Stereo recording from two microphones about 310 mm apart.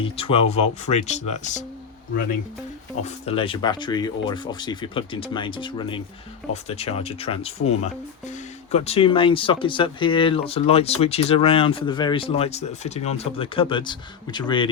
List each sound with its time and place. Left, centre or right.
0.0 s speech: centre
3.0 s speech: centre
8.7 s speech: centre